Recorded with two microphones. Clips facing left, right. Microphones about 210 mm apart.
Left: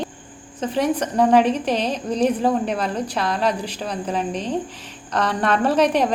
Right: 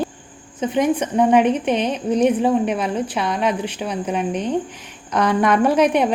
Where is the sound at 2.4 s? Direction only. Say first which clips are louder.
Right 2 dB; 10° right (ahead or behind).